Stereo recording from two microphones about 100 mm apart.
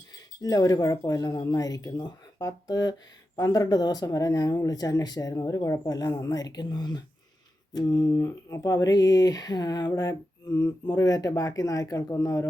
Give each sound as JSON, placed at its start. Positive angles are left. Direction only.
{"t": 0.4, "sound": "speech", "side_deg": 40}